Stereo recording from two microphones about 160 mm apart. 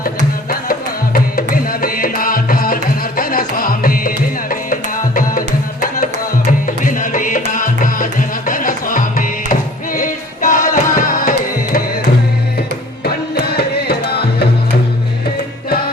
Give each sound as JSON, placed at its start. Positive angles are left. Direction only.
{"t": 0.7, "sound": "music", "side_deg": 65}
{"t": 6.7, "sound": "music", "side_deg": 55}
{"t": 13.1, "sound": "music", "side_deg": 75}